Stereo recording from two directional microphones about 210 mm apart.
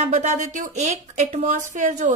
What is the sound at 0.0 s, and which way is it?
A woman's voice, 35° right (ahead or behind).